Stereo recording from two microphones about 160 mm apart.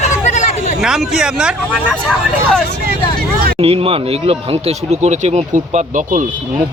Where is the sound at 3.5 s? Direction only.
35° right (ahead or behind).